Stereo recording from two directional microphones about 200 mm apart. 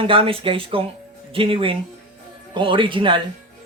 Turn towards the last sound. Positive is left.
turn(degrees=-25)  # may be behind; listen again after turning